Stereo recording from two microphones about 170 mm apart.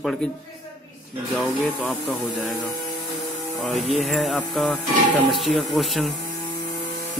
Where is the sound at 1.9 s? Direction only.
Centre (ahead or behind).